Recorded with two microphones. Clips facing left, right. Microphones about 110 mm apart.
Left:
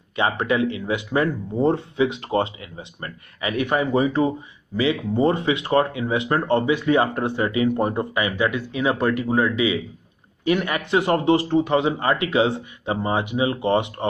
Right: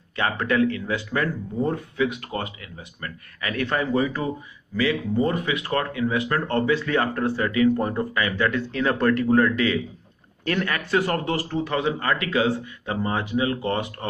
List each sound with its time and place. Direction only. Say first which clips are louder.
0.1 s speech: left 2 dB; 20° left (ahead or behind)